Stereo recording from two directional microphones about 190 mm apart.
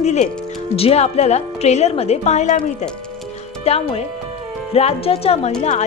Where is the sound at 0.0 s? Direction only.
35° left (ahead or behind).